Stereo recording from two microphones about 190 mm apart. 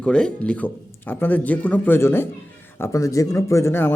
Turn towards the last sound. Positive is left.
turn(degrees=10)  # may be behind; listen again after turning